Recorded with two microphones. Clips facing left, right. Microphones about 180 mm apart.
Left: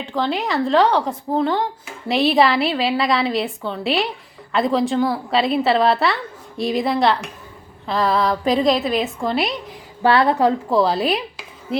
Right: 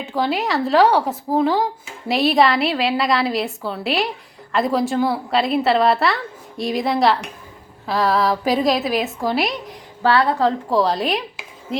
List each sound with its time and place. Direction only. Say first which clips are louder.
0.0 s a woman's voice: right 1 dB; 5° right (ahead or behind)
10.0 s a woman's voice: left 1 dB; 20° left (ahead or behind)
10.7 s a woman's voice: left 1 dB; centre (ahead or behind)